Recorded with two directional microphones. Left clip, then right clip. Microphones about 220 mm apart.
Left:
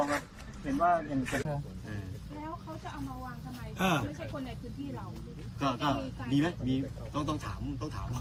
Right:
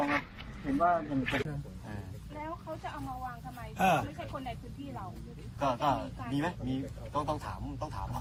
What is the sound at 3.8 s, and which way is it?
Speech, centre (ahead or behind).